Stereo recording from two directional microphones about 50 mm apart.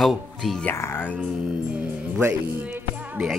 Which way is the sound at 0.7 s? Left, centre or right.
Left.